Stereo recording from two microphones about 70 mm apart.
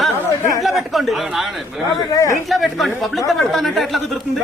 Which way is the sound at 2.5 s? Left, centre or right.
Centre.